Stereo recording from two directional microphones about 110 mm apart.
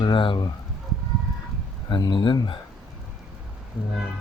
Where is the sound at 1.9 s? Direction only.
45° left (ahead or behind).